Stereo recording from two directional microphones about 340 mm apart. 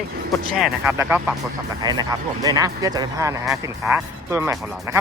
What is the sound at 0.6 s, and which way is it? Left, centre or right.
Speech, centre.